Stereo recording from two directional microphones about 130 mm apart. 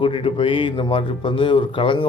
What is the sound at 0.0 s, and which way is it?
A man's voice, 40° left (ahead or behind).